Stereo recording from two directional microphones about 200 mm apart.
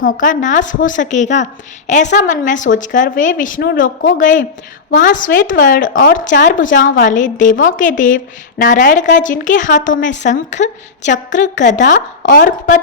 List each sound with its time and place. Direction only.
0.0 s a woman's voice: 40° left (ahead or behind)